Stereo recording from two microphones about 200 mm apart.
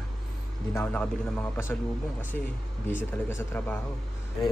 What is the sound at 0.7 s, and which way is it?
A man's voice, 10° left (ahead or behind).